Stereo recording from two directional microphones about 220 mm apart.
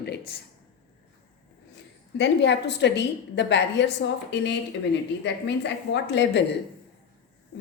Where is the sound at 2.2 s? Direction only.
50° left (ahead or behind).